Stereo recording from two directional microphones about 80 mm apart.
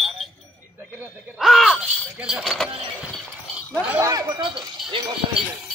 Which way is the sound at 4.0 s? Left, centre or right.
Right.